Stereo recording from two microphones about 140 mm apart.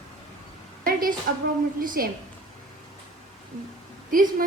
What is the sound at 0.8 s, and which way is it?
A woman's voice, 90° right.